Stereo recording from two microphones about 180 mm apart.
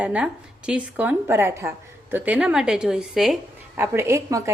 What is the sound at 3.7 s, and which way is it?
Speech, 15° right (ahead or behind).